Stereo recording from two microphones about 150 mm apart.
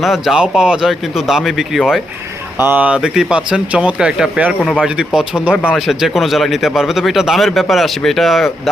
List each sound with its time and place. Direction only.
0.0 s speech: centre (ahead or behind)
2.6 s speech: 10° right (ahead or behind)